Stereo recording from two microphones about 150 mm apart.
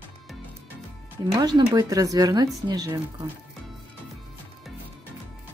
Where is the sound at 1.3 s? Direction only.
30° right (ahead or behind).